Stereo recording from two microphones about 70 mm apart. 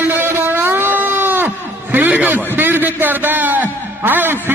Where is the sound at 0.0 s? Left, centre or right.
Right.